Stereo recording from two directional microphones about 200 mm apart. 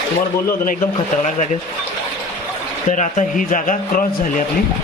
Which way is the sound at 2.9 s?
40° left (ahead or behind).